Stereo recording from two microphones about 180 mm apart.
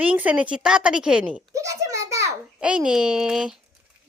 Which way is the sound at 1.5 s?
15° right (ahead or behind).